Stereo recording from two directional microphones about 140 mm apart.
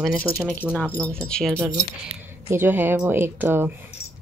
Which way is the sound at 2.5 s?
15° right (ahead or behind).